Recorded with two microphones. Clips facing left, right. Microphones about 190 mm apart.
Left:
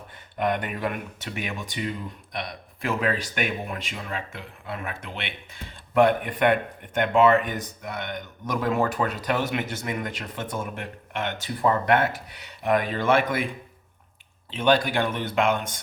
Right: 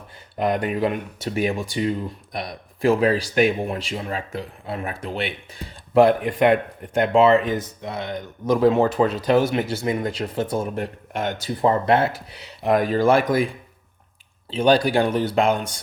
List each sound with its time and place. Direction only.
0.3 s speech: 35° right (ahead or behind)
14.5 s speech: 35° right (ahead or behind)